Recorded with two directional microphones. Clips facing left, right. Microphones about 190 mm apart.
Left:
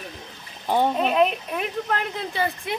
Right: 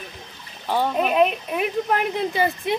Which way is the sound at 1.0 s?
5° right (ahead or behind).